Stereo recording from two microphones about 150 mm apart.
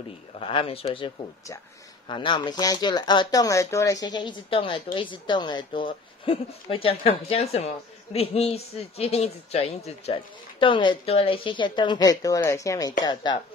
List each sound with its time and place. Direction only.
0.4 s speech: 35° left (ahead or behind)